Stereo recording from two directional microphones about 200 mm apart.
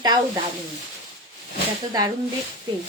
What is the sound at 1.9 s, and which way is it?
Speech, 20° right (ahead or behind).